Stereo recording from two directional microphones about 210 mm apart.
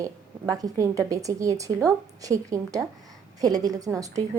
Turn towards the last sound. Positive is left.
turn(degrees=-15)  # may be behind; listen again after turning